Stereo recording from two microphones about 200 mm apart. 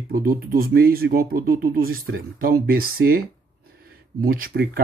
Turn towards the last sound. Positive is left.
turn(degrees=-45)  # may be behind; listen again after turning